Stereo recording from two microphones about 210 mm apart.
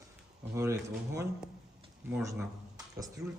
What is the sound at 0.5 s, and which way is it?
Speech, 15° right (ahead or behind).